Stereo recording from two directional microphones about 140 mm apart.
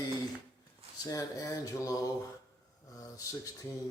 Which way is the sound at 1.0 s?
25° left (ahead or behind).